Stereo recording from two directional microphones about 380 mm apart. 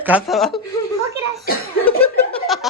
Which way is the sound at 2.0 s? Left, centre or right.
Centre.